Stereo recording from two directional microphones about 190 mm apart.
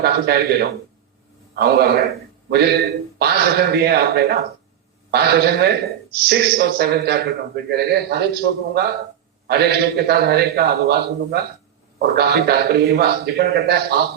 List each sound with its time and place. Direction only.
0.0 s a man's voice: 55° right (ahead or behind)